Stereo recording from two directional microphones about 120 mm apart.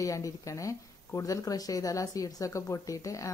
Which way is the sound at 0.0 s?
25° left (ahead or behind).